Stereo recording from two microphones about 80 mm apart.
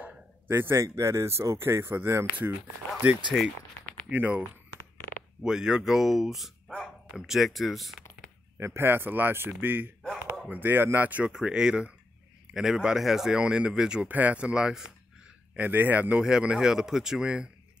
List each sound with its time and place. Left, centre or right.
0.0 s bow-wow: right
0.8 s speech: right
3.3 s speech: centre
4.1 s a man's voice: right
5.4 s speech: centre
8.5 s a man's voice: right; by 14.0 s centre
14.0 s speech: right
15.5 s speech: right